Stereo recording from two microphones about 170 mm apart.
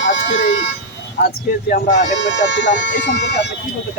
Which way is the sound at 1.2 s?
60° left (ahead or behind).